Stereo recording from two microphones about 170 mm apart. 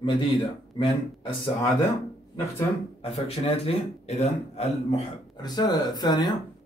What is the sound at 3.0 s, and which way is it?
Speech, 35° left (ahead or behind).